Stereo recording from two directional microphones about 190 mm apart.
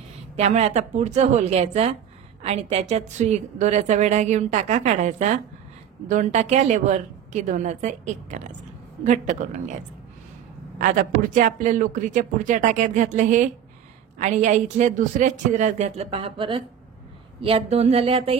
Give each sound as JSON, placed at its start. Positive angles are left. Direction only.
{"t": 0.4, "sound": "a woman's voice", "side_deg": -35}
{"t": 10.8, "sound": "a woman's voice", "side_deg": -45}